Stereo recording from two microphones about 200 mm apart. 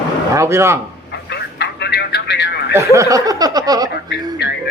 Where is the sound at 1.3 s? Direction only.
55° left (ahead or behind).